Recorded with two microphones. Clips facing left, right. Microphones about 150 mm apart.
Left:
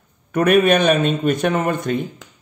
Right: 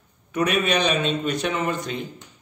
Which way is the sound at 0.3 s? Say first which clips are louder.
Left 8 dB; 50° left (ahead or behind).